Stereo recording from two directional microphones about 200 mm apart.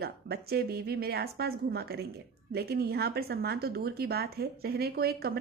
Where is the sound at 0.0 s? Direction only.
50° right (ahead or behind).